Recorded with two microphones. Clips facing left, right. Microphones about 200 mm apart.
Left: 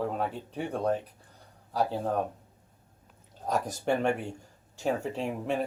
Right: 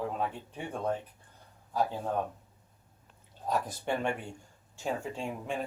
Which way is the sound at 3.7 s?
45° left (ahead or behind).